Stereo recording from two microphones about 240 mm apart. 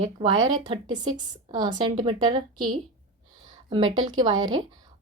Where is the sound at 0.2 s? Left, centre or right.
Centre.